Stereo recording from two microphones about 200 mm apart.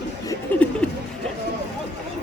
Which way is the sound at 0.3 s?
5° left (ahead or behind).